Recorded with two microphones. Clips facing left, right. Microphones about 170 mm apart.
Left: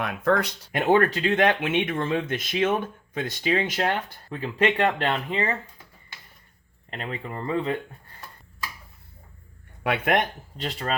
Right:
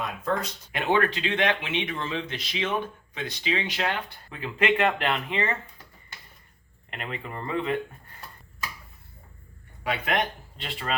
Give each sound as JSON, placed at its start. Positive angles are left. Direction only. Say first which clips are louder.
{"t": 0.0, "sound": "speech", "louder": "left 5 dB", "side_deg": 70}
{"t": 0.7, "sound": "speech", "louder": "left 4 dB", "side_deg": 45}
{"t": 6.9, "sound": "speech", "louder": "left 2 dB", "side_deg": 30}
{"t": 9.8, "sound": "speech", "louder": "left 4 dB", "side_deg": 55}